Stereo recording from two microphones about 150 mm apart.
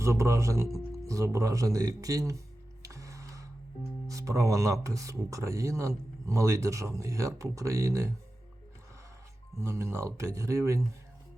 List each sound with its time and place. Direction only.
0.0 s speech: 20° right (ahead or behind)
2.8 s music: 20° right (ahead or behind)
4.0 s speech: 20° right (ahead or behind)
9.6 s speech: 20° right (ahead or behind)